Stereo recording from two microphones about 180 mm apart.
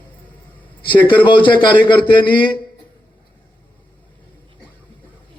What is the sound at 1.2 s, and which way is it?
Speech, 25° left (ahead or behind).